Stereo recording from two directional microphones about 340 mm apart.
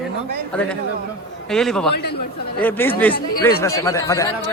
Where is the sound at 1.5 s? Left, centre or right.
Centre.